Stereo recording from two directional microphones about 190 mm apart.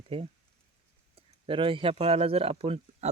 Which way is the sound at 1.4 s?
25° right (ahead or behind).